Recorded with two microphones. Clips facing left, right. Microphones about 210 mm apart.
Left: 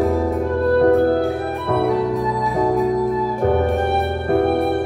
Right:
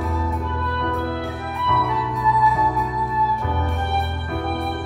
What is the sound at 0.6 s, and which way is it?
Organ, 45° left (ahead or behind).